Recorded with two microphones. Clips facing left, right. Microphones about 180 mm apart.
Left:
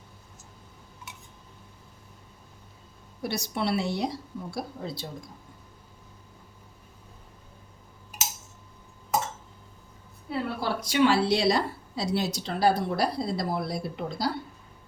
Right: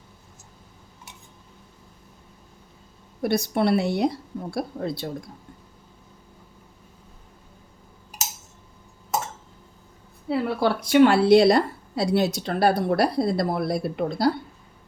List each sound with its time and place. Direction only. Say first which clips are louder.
3.2 s a woman's voice: right 7 dB; 55° right (ahead or behind)
10.2 s a woman's voice: right 7 dB; 65° right (ahead or behind)